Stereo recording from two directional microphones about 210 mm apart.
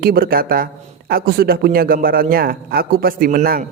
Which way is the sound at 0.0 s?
45° right (ahead or behind).